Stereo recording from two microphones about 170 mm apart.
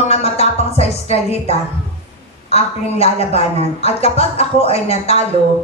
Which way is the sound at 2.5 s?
35° left (ahead or behind).